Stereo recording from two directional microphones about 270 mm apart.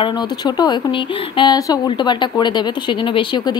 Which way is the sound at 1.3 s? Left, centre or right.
Centre.